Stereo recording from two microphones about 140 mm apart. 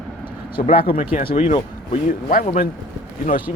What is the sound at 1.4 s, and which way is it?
Speech, 55° left (ahead or behind).